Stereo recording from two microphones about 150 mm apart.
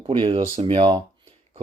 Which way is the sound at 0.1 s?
35° right (ahead or behind).